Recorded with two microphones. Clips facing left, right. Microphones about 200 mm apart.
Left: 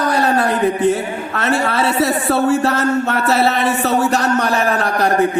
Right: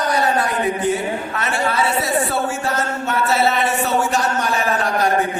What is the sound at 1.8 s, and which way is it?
Speech, 60° left (ahead or behind).